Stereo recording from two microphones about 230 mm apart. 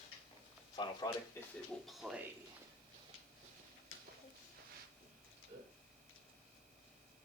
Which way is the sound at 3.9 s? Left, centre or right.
Left.